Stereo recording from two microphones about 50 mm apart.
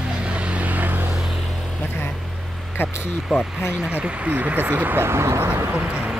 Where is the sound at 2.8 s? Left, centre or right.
Left.